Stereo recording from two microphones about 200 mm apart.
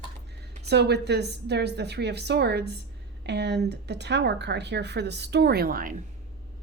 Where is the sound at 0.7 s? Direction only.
55° right (ahead or behind).